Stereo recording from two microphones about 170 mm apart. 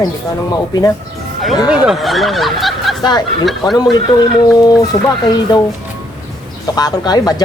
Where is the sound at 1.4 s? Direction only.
Centre (ahead or behind).